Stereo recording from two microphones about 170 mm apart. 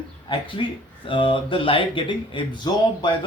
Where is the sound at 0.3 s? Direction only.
30° left (ahead or behind).